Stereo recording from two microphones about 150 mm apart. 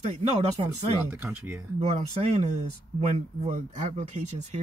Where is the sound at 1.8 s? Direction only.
45° right (ahead or behind).